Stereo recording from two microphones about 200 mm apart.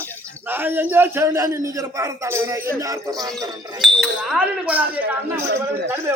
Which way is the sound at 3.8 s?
Centre (ahead or behind).